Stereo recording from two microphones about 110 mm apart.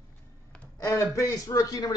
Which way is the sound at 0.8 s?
25° left (ahead or behind).